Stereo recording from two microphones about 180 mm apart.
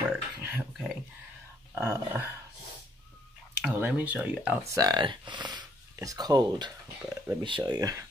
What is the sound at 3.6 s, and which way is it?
Speech, 5° right (ahead or behind).